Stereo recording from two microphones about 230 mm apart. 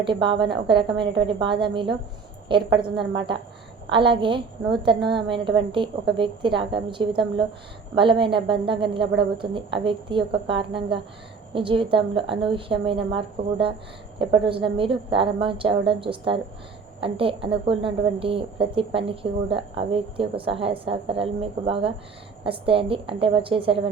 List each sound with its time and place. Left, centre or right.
0.0 s a woman's voice: right
3.9 s a woman's voice: right